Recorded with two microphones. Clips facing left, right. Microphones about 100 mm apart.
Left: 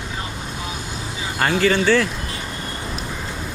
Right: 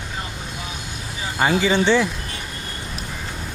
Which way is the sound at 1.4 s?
15° right (ahead or behind).